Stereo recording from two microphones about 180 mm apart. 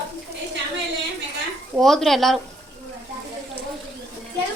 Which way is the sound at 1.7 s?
Centre (ahead or behind).